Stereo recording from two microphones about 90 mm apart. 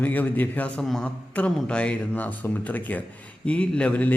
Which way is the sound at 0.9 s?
5° left (ahead or behind).